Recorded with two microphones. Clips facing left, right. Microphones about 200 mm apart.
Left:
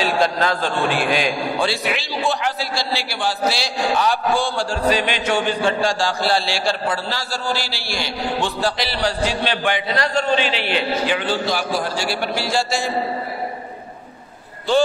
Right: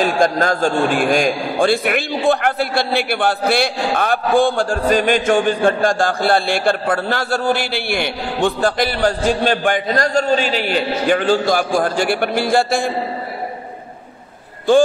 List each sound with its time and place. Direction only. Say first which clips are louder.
0.0 s a man's voice: right 3 dB; 45° right (ahead or behind)